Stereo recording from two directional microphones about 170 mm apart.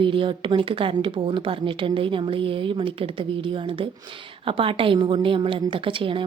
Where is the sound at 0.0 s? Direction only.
30° right (ahead or behind).